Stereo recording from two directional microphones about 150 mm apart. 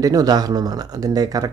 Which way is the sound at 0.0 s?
25° right (ahead or behind).